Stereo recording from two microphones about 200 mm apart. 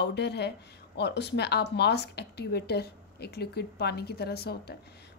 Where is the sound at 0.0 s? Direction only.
55° left (ahead or behind).